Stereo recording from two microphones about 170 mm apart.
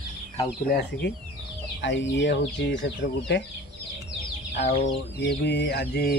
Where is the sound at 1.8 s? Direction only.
90° left.